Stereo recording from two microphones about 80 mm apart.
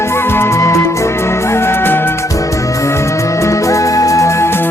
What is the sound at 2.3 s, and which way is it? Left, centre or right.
Music, left.